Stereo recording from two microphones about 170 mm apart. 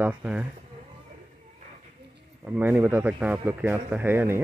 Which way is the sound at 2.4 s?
10° right (ahead or behind).